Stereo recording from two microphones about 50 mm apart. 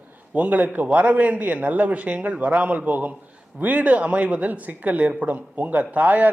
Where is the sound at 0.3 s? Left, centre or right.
Right.